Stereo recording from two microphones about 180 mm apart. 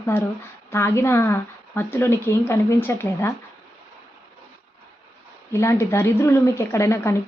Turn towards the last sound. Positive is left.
turn(degrees=15)  # may be behind; listen again after turning